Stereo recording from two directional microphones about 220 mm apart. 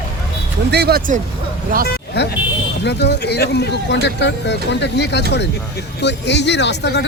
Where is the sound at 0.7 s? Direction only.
45° right (ahead or behind).